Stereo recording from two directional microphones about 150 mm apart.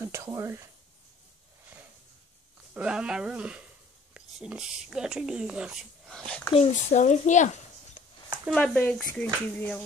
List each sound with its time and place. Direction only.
0.0 s speech: 20° right (ahead or behind)
2.7 s speech: 5° right (ahead or behind)
6.5 s speech: 45° left (ahead or behind)
8.5 s speech: 10° left (ahead or behind)